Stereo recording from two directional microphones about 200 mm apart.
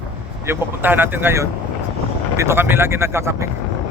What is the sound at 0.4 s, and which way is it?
Speech, 10° right (ahead or behind).